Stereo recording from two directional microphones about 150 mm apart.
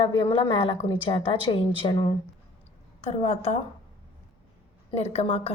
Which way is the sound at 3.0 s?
45° left (ahead or behind).